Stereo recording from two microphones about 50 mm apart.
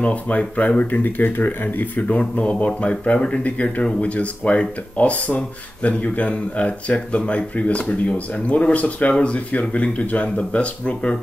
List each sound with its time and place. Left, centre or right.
0.0 s speech: left